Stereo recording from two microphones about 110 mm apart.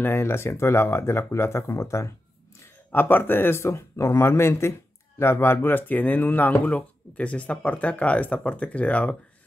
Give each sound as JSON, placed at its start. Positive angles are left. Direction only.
{"t": 0.0, "sound": "speech", "side_deg": 20}